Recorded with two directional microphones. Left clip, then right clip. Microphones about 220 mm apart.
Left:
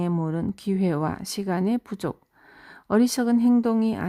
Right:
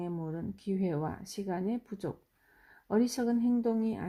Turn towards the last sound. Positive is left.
turn(degrees=30)  # may be behind; listen again after turning